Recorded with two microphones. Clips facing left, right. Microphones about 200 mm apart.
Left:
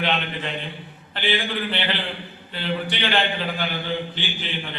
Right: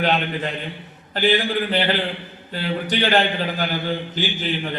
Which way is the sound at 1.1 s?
40° right (ahead or behind).